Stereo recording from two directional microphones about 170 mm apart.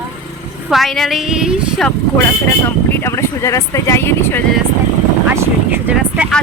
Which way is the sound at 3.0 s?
15° left (ahead or behind).